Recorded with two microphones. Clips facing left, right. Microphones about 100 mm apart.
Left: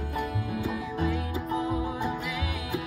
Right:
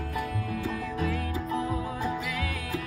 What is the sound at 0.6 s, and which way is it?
Music, 10° left (ahead or behind).